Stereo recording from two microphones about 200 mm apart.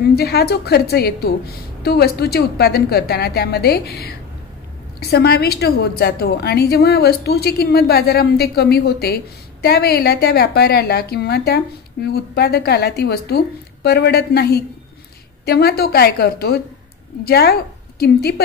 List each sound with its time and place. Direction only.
0.0 s a woman's voice: 50° left (ahead or behind)